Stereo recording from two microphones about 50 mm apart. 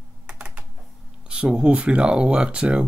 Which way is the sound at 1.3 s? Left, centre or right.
Centre.